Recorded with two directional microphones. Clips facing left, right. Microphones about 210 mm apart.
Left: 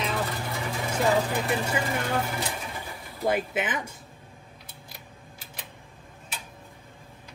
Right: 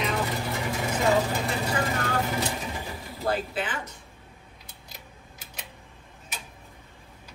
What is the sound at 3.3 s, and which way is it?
Speech, 20° left (ahead or behind).